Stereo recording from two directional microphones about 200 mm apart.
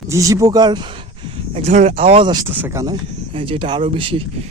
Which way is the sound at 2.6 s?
15° right (ahead or behind).